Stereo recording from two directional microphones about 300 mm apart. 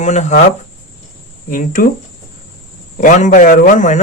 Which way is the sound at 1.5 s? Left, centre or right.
Left.